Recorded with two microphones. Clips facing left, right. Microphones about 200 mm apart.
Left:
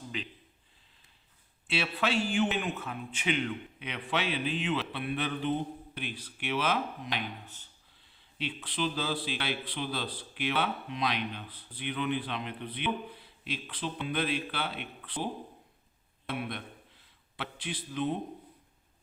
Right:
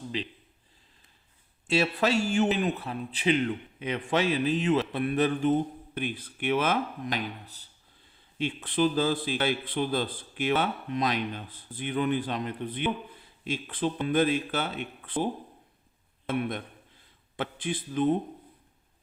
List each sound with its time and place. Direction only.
0.1 s a man's voice: 30° right (ahead or behind)
1.6 s a man's voice: 40° right (ahead or behind)
8.4 s a man's voice: 50° right (ahead or behind)